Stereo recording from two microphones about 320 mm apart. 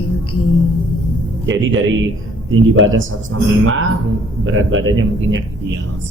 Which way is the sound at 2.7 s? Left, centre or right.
Right.